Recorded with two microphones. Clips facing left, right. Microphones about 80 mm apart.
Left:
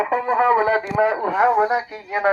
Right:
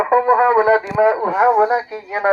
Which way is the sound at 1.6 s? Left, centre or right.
Right.